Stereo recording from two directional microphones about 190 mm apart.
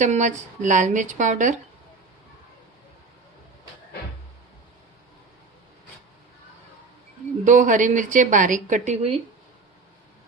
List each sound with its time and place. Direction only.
0.0 s a woman's voice: 40° right (ahead or behind)
7.4 s a woman's voice: 40° right (ahead or behind)